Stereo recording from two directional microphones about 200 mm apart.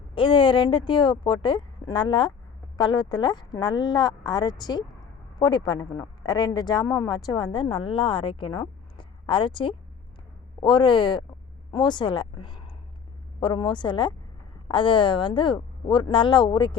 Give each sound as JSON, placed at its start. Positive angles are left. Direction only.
{"t": 0.1, "sound": "a woman's voice", "side_deg": 25}